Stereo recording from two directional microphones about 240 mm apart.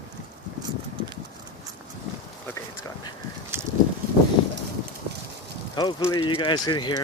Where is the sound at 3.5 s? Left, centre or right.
Centre.